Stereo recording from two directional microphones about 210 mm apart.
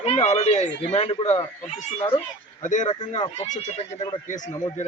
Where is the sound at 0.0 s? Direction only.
30° left (ahead or behind).